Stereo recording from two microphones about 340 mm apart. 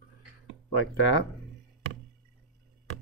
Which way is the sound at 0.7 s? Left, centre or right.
Left.